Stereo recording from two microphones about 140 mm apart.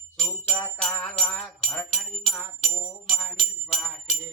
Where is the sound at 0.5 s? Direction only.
10° left (ahead or behind).